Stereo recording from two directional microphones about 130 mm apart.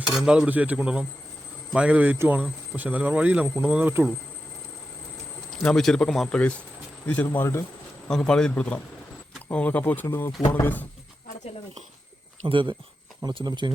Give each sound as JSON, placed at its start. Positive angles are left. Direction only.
{"t": 0.1, "sound": "speech", "side_deg": -5}
{"t": 5.6, "sound": "a man's voice", "side_deg": 5}
{"t": 8.0, "sound": "a man's voice", "side_deg": 5}
{"t": 12.5, "sound": "speech", "side_deg": -40}